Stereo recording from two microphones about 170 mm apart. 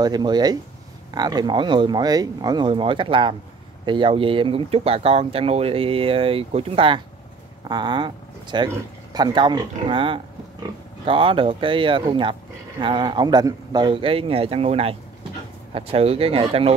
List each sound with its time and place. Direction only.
0.0 s speech: 25° right (ahead or behind)